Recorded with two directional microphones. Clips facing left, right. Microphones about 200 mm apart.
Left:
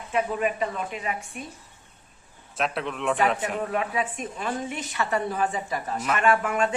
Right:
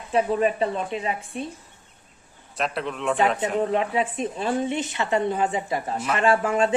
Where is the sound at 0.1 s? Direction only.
35° right (ahead or behind).